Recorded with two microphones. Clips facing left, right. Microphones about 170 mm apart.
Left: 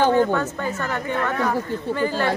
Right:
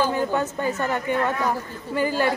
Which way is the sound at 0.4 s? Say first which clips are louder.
Right 1 dB; 15° right (ahead or behind).